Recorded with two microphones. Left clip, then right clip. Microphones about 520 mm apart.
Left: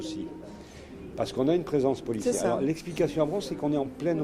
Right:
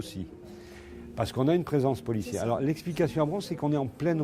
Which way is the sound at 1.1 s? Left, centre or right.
Right.